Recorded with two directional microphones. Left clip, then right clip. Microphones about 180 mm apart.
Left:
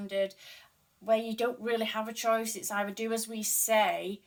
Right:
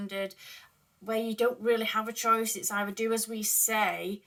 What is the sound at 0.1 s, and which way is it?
Speech, 15° left (ahead or behind).